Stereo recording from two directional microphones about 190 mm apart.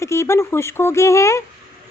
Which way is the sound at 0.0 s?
15° left (ahead or behind).